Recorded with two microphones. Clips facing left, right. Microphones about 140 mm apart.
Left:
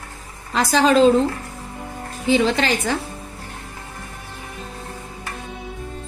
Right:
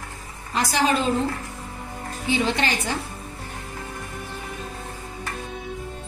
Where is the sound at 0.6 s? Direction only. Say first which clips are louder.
Left 7 dB; 90° left.